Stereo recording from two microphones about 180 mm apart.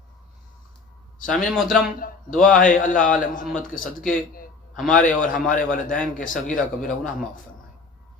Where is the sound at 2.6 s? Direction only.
45° left (ahead or behind).